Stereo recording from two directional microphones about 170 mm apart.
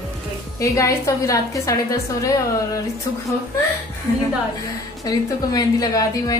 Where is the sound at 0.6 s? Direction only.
20° left (ahead or behind).